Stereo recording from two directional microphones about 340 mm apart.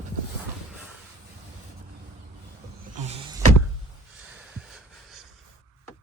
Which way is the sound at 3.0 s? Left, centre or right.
Centre.